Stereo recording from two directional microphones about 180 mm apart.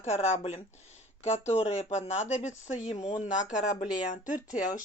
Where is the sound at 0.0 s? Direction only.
40° left (ahead or behind).